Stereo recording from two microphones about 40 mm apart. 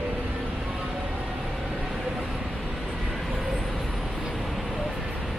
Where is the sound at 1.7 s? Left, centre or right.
Centre.